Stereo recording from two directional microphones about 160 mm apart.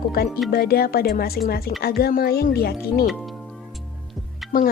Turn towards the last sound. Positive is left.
turn(degrees=0)  # may be behind; listen again after turning